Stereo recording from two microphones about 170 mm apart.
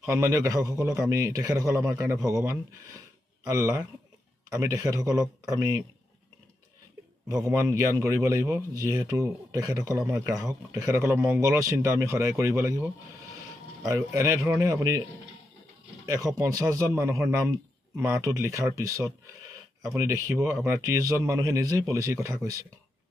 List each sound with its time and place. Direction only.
0.0 s a man's voice: 15° right (ahead or behind)
7.4 s speech: 15° right (ahead or behind)
14.1 s speech: 15° right (ahead or behind)
16.1 s speech: 20° right (ahead or behind)